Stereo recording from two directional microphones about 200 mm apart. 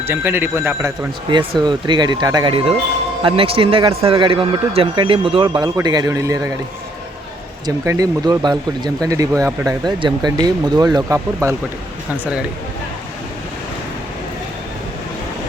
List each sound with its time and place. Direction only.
0.0 s a man's voice: 10° right (ahead or behind)
7.9 s a man's voice: 20° right (ahead or behind)